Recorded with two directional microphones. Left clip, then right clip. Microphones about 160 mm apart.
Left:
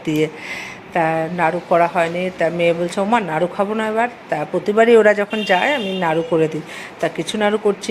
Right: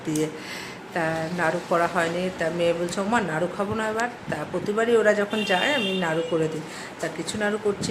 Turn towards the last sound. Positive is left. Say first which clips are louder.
# left 8 dB
turn(degrees=35)  # may be behind; listen again after turning